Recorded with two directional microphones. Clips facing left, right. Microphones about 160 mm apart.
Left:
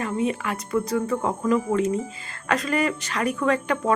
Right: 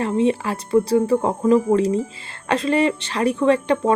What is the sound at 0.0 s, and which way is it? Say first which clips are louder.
Speech: right 6 dB; 30° right (ahead or behind).